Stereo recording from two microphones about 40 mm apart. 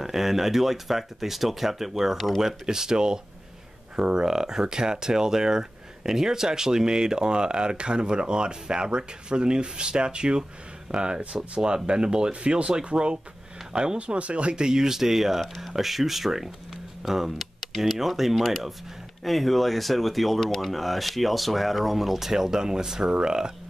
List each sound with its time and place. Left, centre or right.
0.0 s speech: centre
2.6 s speech: centre